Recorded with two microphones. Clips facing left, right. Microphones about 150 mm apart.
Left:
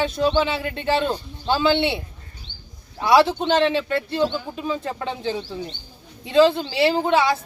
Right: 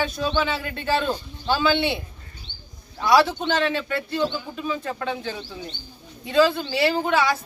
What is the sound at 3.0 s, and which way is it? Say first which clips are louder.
Speech: left 2 dB; 25° left (ahead or behind).